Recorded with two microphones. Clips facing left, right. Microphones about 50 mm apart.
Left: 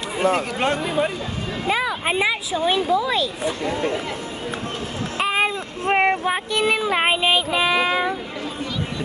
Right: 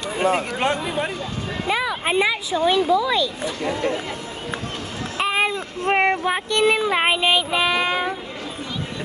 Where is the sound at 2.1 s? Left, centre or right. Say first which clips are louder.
Right 1 dB; centre.